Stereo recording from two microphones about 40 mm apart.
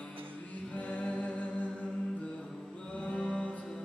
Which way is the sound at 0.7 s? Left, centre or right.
Left.